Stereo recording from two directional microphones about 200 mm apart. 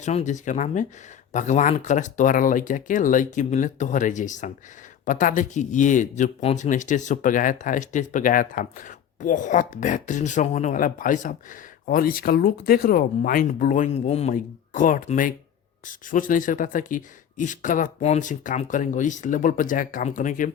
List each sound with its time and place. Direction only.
0.0 s speech: 35° left (ahead or behind)